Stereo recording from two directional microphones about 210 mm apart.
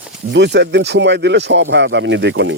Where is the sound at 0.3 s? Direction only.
55° right (ahead or behind).